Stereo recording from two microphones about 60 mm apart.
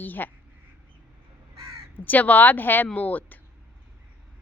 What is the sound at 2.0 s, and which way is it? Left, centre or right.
Speech, left.